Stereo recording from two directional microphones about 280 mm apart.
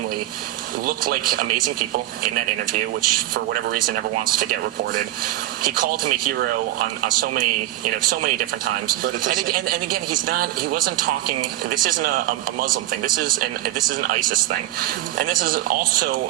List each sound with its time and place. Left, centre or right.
0.9 s speech: right
3.1 s speech: right